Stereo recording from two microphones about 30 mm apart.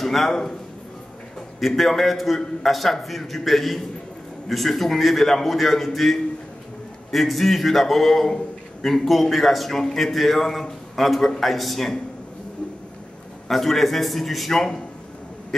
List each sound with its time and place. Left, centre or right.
0.0 s a man's voice: centre
1.6 s a man's voice: centre
7.1 s a man's voice: centre
13.5 s a man's voice: centre
14.5 s speech: centre